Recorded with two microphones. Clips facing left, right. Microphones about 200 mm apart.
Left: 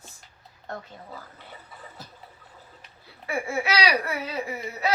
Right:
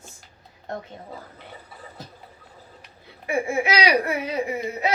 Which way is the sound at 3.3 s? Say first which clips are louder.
Right 4 dB; 20° right (ahead or behind).